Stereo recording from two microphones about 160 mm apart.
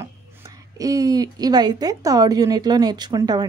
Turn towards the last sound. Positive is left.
turn(degrees=-25)  # may be behind; listen again after turning